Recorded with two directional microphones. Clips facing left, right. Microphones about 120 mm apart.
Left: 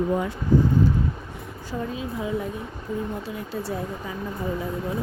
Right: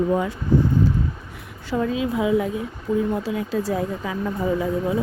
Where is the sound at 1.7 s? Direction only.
90° right.